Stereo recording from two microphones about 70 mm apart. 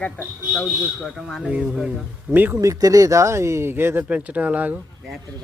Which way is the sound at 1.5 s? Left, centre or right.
Centre.